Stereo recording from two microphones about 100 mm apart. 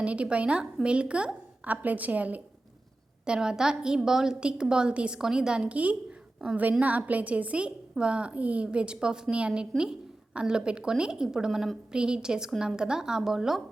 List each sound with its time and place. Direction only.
0.0 s a woman's voice: 10° right (ahead or behind)